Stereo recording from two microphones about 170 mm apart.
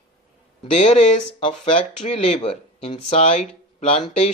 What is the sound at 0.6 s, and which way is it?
Speech, 40° left (ahead or behind).